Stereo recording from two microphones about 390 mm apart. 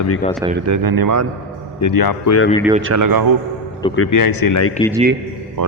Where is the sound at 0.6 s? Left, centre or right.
Right.